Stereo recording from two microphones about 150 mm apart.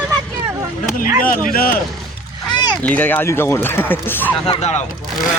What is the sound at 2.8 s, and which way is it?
Speech, 10° left (ahead or behind).